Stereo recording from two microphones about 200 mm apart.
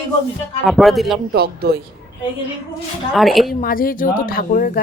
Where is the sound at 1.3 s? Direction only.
50° right (ahead or behind).